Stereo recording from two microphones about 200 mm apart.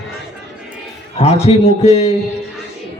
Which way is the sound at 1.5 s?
35° left (ahead or behind).